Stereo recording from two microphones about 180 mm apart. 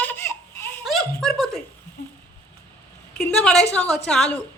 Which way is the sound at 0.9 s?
Centre (ahead or behind).